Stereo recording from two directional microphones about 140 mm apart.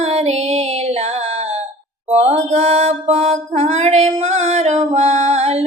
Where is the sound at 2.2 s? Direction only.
45° right (ahead or behind).